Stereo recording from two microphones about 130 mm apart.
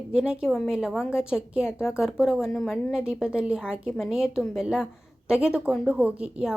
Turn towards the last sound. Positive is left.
turn(degrees=-5)  # may be behind; listen again after turning